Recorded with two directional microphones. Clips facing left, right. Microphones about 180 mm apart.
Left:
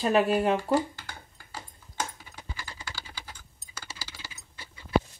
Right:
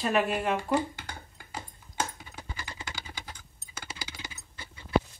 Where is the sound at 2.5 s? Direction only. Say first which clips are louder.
Even; 20° right (ahead or behind).